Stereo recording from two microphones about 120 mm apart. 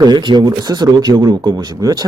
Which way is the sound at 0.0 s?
40° right (ahead or behind).